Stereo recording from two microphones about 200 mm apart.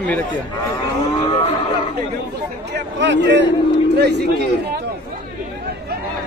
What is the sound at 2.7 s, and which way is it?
Speech, 60° right (ahead or behind).